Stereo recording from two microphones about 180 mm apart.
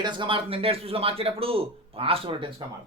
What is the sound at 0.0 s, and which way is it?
Speech, 25° right (ahead or behind).